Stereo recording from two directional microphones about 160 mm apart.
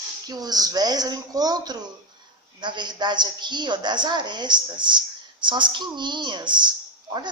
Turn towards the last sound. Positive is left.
turn(degrees=-30)  # may be behind; listen again after turning